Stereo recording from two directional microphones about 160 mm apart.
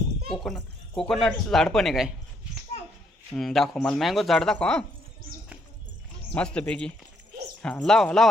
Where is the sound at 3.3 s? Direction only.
Centre (ahead or behind).